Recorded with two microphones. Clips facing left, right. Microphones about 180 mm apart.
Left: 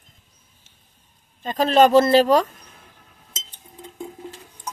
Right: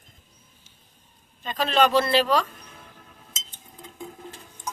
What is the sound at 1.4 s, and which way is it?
Speech, 45° left (ahead or behind).